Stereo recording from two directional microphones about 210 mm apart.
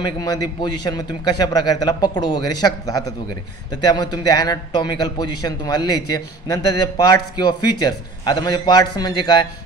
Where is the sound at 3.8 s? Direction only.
20° left (ahead or behind).